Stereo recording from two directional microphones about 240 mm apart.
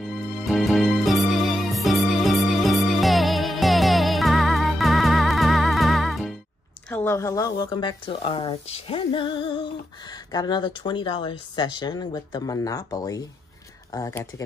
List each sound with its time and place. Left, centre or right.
0.0 s music: centre
6.9 s speech: centre